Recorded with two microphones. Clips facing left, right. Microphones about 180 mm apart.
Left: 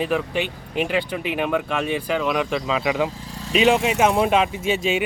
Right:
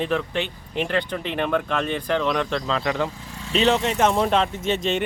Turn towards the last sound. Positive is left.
turn(degrees=10)  # may be behind; listen again after turning